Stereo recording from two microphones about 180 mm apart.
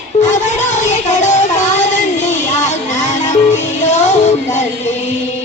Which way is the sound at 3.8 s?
40° left (ahead or behind).